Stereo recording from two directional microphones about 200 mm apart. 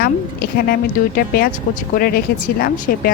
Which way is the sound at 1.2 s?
50° left (ahead or behind).